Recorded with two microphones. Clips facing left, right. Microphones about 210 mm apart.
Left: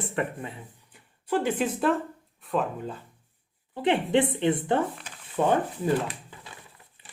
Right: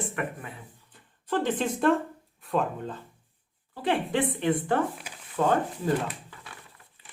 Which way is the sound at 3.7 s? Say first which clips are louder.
Left 4 dB; 20° left (ahead or behind).